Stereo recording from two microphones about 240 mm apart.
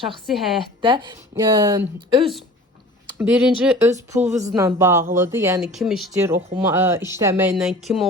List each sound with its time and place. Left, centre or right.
0.3 s speech: centre
0.8 s a woman's voice: centre
3.2 s a woman's voice: centre
5.7 s a woman's voice: centre